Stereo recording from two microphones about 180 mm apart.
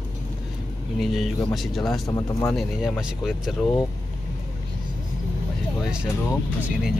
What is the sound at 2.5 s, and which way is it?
Speech, centre (ahead or behind).